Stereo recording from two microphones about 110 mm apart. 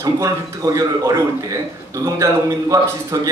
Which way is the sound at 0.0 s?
30° right (ahead or behind).